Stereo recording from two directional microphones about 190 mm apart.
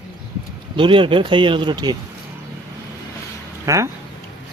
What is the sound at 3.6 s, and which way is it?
Speech, 15° right (ahead or behind).